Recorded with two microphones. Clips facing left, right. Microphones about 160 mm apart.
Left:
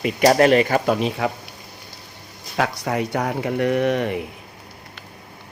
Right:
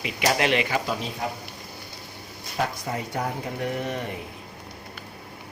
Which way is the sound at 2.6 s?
75° left (ahead or behind).